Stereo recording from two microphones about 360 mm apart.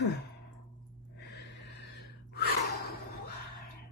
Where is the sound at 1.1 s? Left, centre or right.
Left.